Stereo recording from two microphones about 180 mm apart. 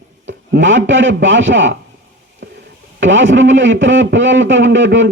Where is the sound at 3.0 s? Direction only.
90° right.